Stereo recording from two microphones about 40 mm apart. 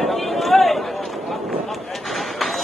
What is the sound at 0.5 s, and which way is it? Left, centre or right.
Run, centre.